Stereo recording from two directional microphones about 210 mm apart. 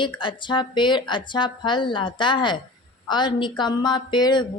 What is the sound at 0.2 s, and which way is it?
A woman's voice, 25° left (ahead or behind).